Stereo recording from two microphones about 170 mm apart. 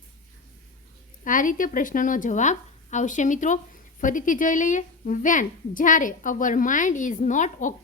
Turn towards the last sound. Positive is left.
turn(degrees=50)  # may be behind; listen again after turning